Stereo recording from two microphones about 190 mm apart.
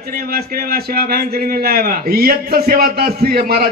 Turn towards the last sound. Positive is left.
turn(degrees=-55)  # may be behind; listen again after turning